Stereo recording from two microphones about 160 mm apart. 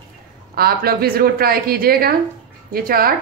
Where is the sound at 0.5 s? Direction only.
75° right (ahead or behind).